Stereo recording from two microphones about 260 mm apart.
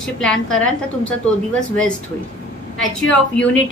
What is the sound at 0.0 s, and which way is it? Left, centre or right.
A woman's voice, centre.